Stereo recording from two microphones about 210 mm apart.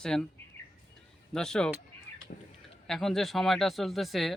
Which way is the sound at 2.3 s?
45° left (ahead or behind).